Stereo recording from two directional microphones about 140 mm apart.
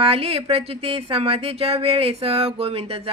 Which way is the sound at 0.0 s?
45° right (ahead or behind).